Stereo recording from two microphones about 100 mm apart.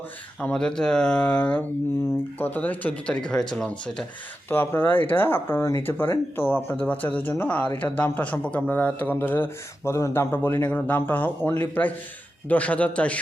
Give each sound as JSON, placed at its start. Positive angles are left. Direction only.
{"t": 0.3, "sound": "speech", "side_deg": 10}
{"t": 4.4, "sound": "speech", "side_deg": 20}